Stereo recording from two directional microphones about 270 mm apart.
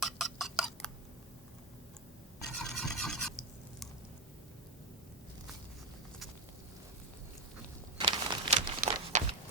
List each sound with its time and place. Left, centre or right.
0.0 s tick: centre
2.6 s filing: centre
7.9 s a sound: centre